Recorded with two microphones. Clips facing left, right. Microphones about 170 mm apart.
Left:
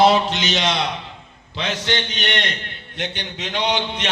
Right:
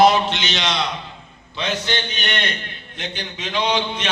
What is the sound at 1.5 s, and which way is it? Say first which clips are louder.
Speech: even; 80° left.